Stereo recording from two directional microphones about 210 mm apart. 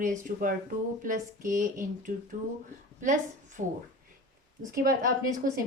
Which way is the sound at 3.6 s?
35° right (ahead or behind).